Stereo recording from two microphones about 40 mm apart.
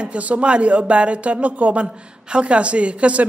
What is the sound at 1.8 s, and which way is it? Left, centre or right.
Speech, right.